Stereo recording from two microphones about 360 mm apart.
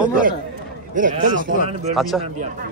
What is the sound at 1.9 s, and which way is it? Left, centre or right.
Speech, centre.